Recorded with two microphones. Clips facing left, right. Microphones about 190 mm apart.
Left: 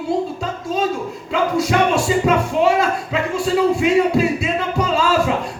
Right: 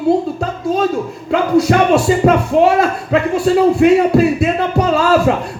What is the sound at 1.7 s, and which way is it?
Speech, 60° right (ahead or behind).